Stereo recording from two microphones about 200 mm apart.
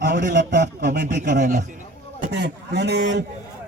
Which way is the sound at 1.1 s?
40° right (ahead or behind).